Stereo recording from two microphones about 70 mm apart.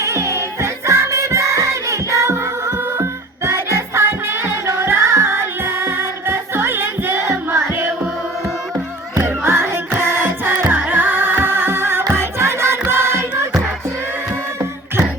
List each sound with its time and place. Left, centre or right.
0.0 s music: right
9.1 s music: right